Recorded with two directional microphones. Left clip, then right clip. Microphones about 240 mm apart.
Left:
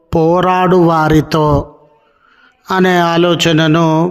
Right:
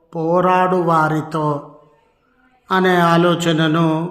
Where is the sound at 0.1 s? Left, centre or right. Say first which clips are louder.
Left 4 dB; left.